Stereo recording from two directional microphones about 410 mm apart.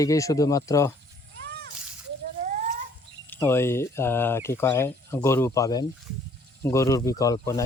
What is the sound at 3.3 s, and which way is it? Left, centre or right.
Speech, centre.